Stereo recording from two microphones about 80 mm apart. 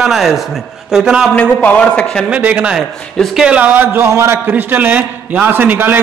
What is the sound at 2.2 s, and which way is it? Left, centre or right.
A man's voice, centre.